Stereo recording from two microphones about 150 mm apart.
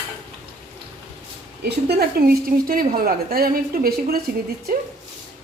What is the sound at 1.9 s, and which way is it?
A woman's voice, 90° right.